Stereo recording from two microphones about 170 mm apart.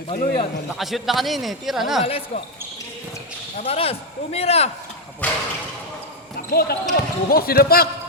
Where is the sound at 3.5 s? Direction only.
35° left (ahead or behind).